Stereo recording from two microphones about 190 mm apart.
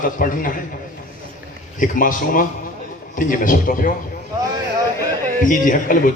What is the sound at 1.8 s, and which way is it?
A man's voice, 45° left (ahead or behind).